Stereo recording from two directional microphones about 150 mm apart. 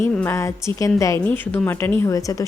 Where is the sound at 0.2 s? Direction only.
15° left (ahead or behind).